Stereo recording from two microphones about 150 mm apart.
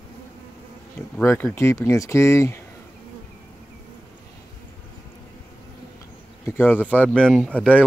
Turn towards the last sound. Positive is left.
turn(degrees=10)  # may be behind; listen again after turning